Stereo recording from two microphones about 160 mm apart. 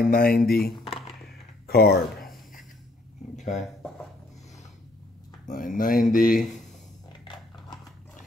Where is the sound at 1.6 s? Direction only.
80° left.